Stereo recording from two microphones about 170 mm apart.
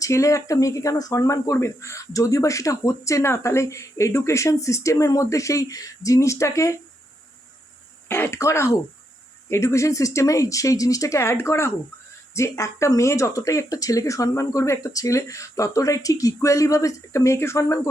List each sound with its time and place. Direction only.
0.0 s speech: 20° left (ahead or behind)
8.0 s speech: 15° left (ahead or behind)